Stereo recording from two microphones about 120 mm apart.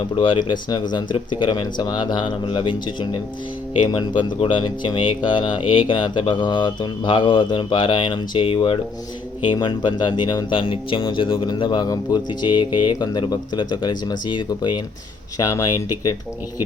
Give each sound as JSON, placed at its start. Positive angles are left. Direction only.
{"t": 0.2, "sound": "speech", "side_deg": 40}
{"t": 15.4, "sound": "speech", "side_deg": 25}